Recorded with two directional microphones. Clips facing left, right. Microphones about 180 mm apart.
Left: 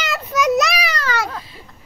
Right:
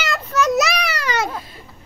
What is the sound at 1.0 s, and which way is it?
Babbling, 20° right (ahead or behind).